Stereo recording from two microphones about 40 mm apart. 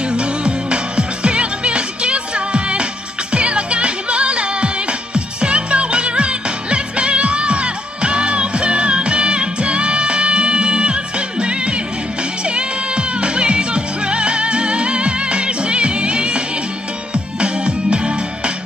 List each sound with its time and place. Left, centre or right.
0.1 s music: right